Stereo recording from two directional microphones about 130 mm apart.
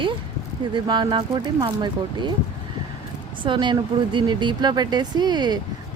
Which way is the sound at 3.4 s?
35° right (ahead or behind).